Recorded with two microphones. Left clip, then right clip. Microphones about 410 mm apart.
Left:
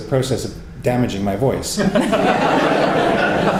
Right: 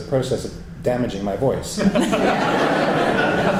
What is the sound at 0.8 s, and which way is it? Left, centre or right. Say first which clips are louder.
Speech: left 2 dB; left.